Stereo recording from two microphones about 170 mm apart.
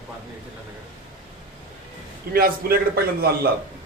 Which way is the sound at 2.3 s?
60° right (ahead or behind).